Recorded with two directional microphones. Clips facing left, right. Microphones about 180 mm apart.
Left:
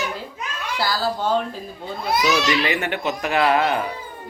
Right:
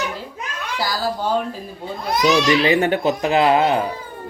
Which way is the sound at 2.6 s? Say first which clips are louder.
Right 7 dB; 30° right (ahead or behind).